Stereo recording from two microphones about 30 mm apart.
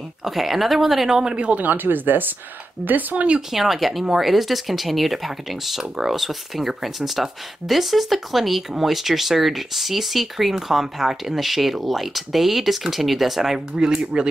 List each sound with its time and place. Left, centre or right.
0.2 s speech: centre
1.3 s speech: right
1.6 s speech: right
3.5 s speech: centre
13.7 s speech: right